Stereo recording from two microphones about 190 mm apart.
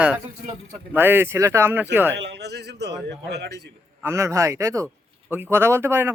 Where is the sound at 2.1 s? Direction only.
65° right (ahead or behind).